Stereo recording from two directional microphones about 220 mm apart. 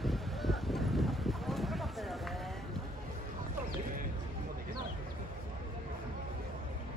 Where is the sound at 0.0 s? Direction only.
Centre (ahead or behind).